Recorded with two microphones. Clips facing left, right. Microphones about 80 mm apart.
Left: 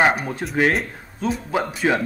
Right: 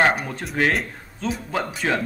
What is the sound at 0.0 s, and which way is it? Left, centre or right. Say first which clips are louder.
Speech: left 1 dB; centre.